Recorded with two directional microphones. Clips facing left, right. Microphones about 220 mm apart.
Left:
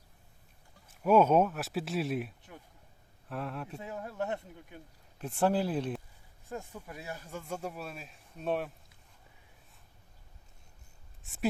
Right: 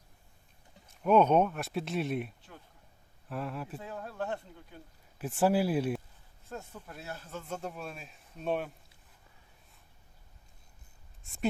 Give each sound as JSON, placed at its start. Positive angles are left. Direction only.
{"t": 0.9, "sound": "speech", "side_deg": 5}
{"t": 3.8, "sound": "speech", "side_deg": 15}
{"t": 5.1, "sound": "speech", "side_deg": -5}
{"t": 6.5, "sound": "speech", "side_deg": 10}